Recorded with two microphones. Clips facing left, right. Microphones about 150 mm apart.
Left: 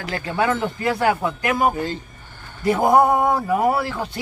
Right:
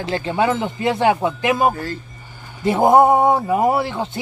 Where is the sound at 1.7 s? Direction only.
20° left (ahead or behind).